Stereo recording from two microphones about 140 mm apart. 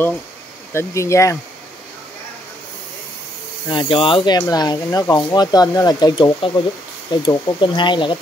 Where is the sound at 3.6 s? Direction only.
35° left (ahead or behind); by 5.1 s 20° left (ahead or behind).